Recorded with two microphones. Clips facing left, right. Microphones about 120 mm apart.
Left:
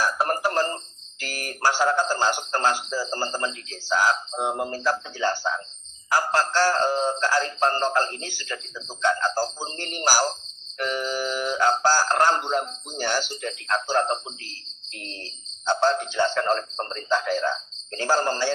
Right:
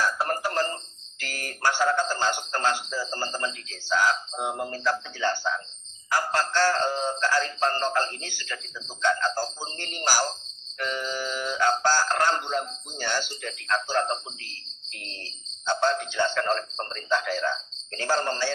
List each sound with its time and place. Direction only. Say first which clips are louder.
0.0 s a sound: left 3 dB; 25° left (ahead or behind)
1.6 s speech: left 2 dB; 25° left (ahead or behind)
4.1 s a man's voice: left 3 dB; 25° left (ahead or behind)
10.8 s music: left 3 dB; 25° left (ahead or behind)
11.0 s music: left 4 dB; 40° left (ahead or behind)
11.7 s a man's voice: left 2 dB; 35° left (ahead or behind)
14.8 s jingle bell: left 4 dB; 30° left (ahead or behind)
15.6 s a man's voice: left 3 dB; 30° left (ahead or behind)